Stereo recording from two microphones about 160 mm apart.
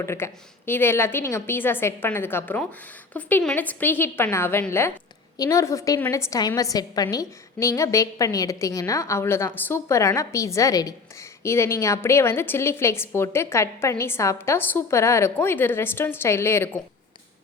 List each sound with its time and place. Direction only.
0.0 s a woman's voice: 15° left (ahead or behind)